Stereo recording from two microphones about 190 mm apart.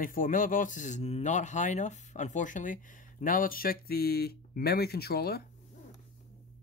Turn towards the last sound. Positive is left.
turn(degrees=55)  # may be behind; listen again after turning